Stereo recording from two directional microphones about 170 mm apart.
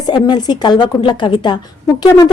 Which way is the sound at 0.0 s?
25° left (ahead or behind).